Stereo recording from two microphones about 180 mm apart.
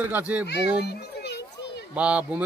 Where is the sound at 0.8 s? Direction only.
70° left (ahead or behind).